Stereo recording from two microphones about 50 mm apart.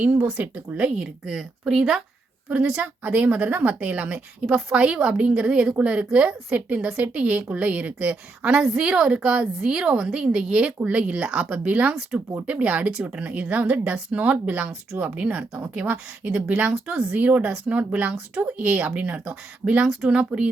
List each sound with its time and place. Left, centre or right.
0.0 s a woman's voice: right
1.2 s speech: centre
2.8 s a woman's voice: right
12.9 s a woman's voice: centre
20.1 s a woman's voice: centre